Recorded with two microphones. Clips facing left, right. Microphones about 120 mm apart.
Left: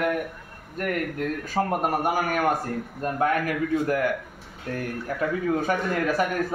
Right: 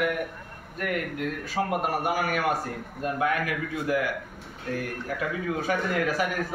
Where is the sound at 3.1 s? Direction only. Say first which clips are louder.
Left 4 dB; 45° left (ahead or behind).